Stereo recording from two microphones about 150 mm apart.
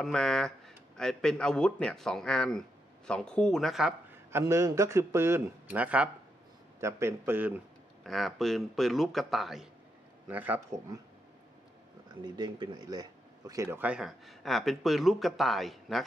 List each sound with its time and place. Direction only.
0.0 s speech: 5° left (ahead or behind)
4.3 s a man's voice: 20° right (ahead or behind)
8.0 s speech: centre (ahead or behind)
10.2 s a man's voice: 10° right (ahead or behind)
12.2 s speech: 30° right (ahead or behind); by 16.0 s centre (ahead or behind)